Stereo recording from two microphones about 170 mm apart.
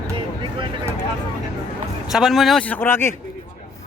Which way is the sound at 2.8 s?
15° left (ahead or behind).